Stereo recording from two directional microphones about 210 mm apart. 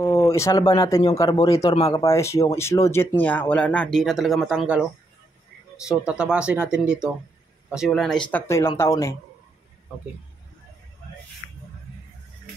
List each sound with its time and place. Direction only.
0.0 s speech: 15° left (ahead or behind); by 4.8 s 5° right (ahead or behind)
5.9 s speech: 5° right (ahead or behind)
8.3 s speech: 10° left (ahead or behind)